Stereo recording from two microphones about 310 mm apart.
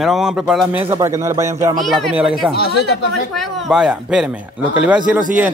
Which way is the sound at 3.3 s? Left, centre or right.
Centre.